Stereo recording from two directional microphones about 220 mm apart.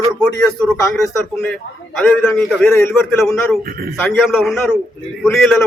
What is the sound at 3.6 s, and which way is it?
Speech, 40° right (ahead or behind).